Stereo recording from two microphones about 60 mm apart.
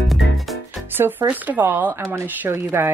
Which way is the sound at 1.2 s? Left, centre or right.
Right.